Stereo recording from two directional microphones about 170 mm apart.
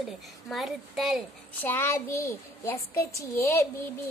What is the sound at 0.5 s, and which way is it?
Speech, centre (ahead or behind).